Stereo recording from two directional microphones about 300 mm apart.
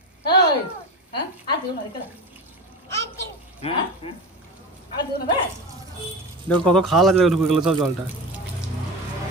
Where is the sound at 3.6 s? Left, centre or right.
Centre.